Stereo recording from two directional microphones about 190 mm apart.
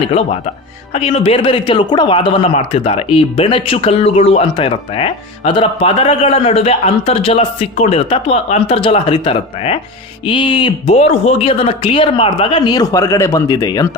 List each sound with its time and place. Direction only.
0.9 s a man's voice: 30° left (ahead or behind)